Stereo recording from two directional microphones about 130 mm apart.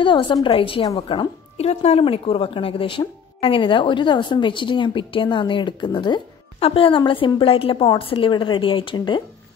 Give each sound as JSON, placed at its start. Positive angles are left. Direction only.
{"t": 0.0, "sound": "a woman's voice", "side_deg": 40}